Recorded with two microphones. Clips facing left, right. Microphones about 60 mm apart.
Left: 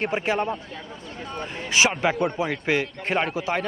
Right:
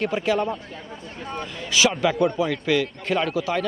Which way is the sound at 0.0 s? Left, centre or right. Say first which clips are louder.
Right 2 dB; left.